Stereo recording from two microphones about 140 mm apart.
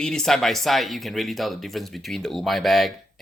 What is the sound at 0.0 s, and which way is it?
Speech, 5° left (ahead or behind).